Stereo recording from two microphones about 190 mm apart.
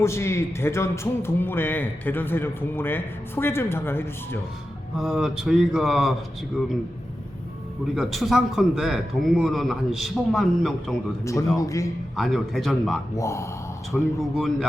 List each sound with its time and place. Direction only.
0.0 s speech: 15° left (ahead or behind)
4.9 s a man's voice: 5° right (ahead or behind)
7.9 s a man's voice: centre (ahead or behind)
11.2 s speech: 15° left (ahead or behind)
12.1 s a man's voice: centre (ahead or behind)
13.1 s speech: 15° left (ahead or behind)
13.9 s a man's voice: centre (ahead or behind)